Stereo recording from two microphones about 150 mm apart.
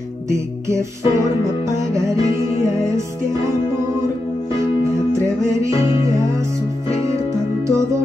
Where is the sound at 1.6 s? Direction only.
20° right (ahead or behind).